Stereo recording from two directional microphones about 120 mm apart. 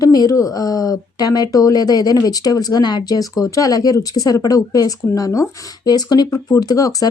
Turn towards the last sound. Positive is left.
turn(degrees=30)  # may be behind; listen again after turning